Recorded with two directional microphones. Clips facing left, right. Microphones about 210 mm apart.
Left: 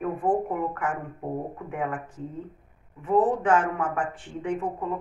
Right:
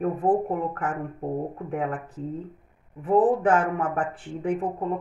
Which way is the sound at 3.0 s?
35° right (ahead or behind).